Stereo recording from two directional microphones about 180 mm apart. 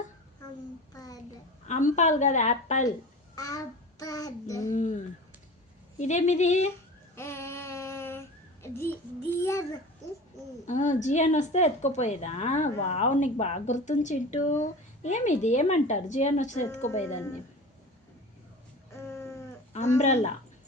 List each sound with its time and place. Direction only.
0.9 s child singing: 20° left (ahead or behind)
1.6 s a woman's voice: 45° left (ahead or behind)
3.3 s child singing: 20° left (ahead or behind)
4.7 s speech: 40° left (ahead or behind)
6.0 s a woman's voice: 40° left (ahead or behind)
7.2 s child singing: 15° left (ahead or behind)
10.7 s a woman's voice: 40° left (ahead or behind)
18.9 s a sound: 15° left (ahead or behind)
19.7 s speech: 40° left (ahead or behind)